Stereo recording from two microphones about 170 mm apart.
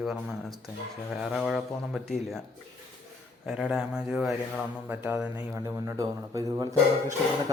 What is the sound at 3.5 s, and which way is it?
A man's voice, 5° right (ahead or behind).